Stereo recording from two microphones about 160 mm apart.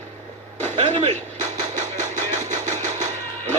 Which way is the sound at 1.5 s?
50° right (ahead or behind).